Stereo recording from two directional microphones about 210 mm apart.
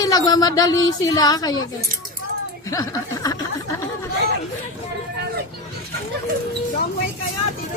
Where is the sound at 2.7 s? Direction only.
15° left (ahead or behind).